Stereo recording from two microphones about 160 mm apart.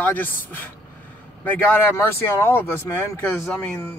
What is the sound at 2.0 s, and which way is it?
Speech, 15° left (ahead or behind).